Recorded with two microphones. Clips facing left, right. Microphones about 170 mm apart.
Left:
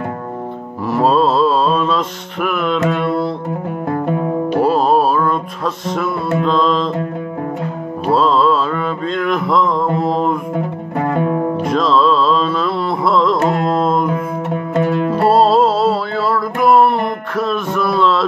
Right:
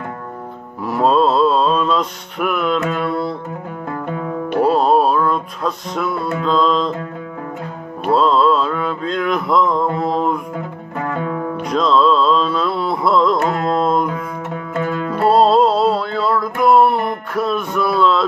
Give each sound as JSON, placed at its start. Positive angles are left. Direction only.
{"t": 0.8, "sound": "mantra", "side_deg": 0}
{"t": 2.9, "sound": "music", "side_deg": 0}
{"t": 3.9, "sound": "music", "side_deg": 35}
{"t": 4.6, "sound": "music", "side_deg": 0}
{"t": 8.1, "sound": "mantra", "side_deg": 0}
{"t": 10.0, "sound": "music", "side_deg": 0}
{"t": 11.0, "sound": "music", "side_deg": 30}
{"t": 11.6, "sound": "music", "side_deg": 0}
{"t": 13.4, "sound": "carnatic music", "side_deg": 25}
{"t": 13.7, "sound": "music", "side_deg": 0}
{"t": 14.8, "sound": "music", "side_deg": 25}
{"t": 15.2, "sound": "music", "side_deg": 5}